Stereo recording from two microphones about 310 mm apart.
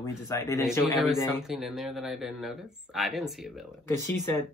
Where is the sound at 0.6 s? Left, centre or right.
Centre.